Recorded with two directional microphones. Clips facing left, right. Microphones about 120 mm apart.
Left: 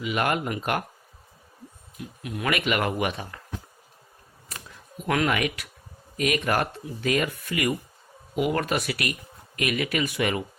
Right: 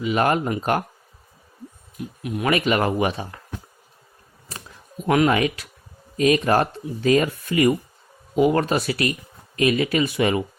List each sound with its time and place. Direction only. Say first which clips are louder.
0.0 s speech: right 5 dB; 35° right (ahead or behind)
2.2 s speech: right 5 dB; 25° right (ahead or behind)
5.0 s speech: right 6 dB; 25° right (ahead or behind)